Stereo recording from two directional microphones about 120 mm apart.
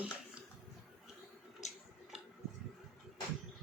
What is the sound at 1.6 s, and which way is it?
Tick-tock, 80° left.